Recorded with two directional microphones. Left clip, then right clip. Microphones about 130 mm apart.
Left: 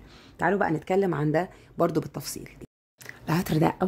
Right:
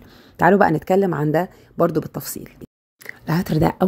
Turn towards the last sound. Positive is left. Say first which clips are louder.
# right 5 dB
turn(degrees=-15)  # may be behind; listen again after turning